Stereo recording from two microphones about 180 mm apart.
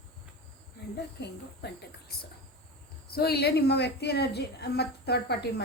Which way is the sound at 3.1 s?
60° left (ahead or behind).